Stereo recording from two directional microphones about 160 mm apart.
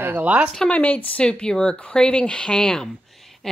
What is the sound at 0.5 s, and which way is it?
Speech, 10° left (ahead or behind).